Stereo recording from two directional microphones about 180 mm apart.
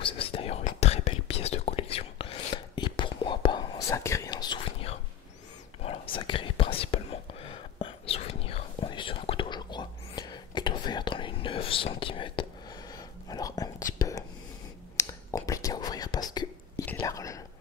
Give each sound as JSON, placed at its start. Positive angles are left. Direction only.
{"t": 0.0, "sound": "whispering", "side_deg": 30}